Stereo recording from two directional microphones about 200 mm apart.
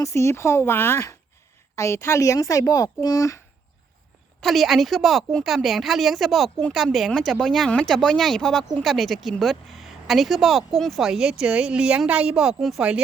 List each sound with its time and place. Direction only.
0.0 s speech: 15° left (ahead or behind)
4.4 s a woman's voice: centre (ahead or behind)